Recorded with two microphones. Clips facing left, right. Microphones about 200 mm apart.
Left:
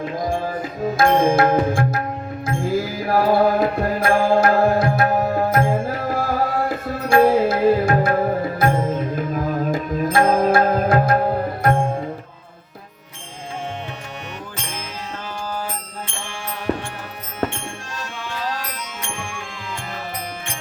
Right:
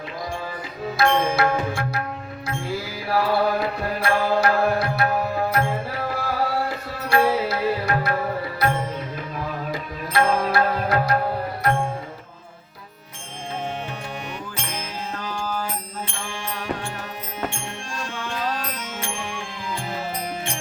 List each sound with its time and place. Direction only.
0.0 s music: 45° left (ahead or behind)